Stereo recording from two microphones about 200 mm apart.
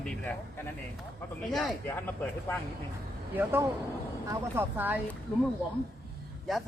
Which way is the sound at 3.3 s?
10° right (ahead or behind).